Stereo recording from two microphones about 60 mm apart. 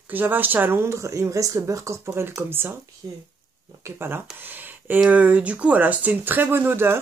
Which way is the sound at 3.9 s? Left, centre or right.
Right.